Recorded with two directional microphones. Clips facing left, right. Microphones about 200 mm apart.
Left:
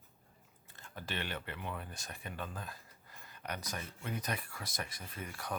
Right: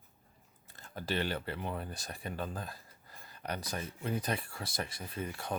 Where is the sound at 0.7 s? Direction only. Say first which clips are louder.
Right 7 dB; 35° right (ahead or behind).